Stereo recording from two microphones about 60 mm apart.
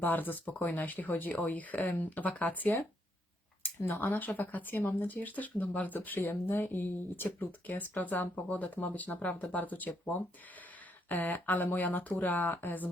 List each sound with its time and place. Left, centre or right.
0.0 s speech: left